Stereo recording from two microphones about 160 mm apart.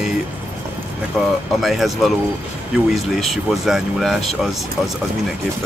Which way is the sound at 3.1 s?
Centre (ahead or behind).